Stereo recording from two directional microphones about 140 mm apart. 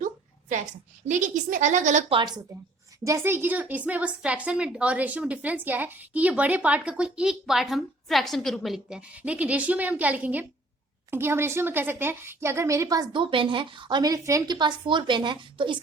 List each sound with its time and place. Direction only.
0.0 s a woman's voice: 65° right (ahead or behind)
2.0 s a woman's voice: 35° right (ahead or behind)
3.0 s a woman's voice: 20° right (ahead or behind); by 15.8 s 35° right (ahead or behind)